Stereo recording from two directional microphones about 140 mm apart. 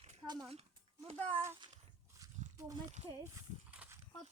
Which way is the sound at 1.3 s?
15° right (ahead or behind).